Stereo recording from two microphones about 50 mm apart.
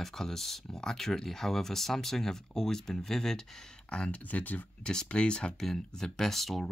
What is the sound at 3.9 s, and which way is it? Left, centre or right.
Speech, left.